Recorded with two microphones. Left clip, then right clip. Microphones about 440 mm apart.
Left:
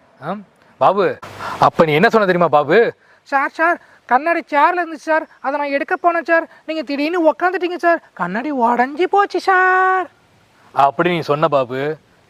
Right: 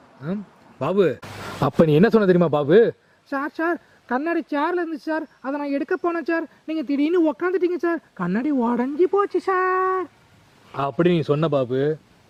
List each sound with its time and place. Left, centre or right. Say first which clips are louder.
0.8 s a man's voice: left 6 dB; left
10.8 s a man's voice: left 7 dB; left